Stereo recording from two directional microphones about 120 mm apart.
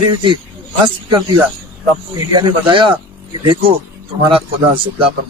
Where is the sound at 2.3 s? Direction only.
40° right (ahead or behind).